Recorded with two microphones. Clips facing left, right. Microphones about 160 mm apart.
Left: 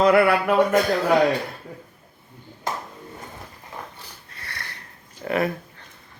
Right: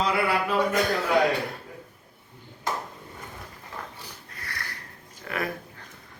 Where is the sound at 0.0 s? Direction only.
60° left (ahead or behind).